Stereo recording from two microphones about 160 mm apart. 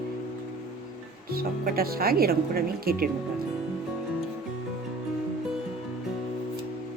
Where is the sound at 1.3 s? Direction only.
70° right (ahead or behind).